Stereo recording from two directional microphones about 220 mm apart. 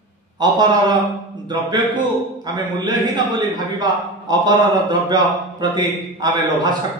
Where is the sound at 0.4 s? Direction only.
20° right (ahead or behind).